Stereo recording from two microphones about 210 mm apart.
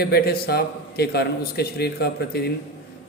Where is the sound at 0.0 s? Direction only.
50° left (ahead or behind).